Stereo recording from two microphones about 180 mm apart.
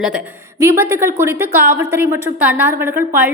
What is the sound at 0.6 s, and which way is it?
A woman's voice, 15° right (ahead or behind).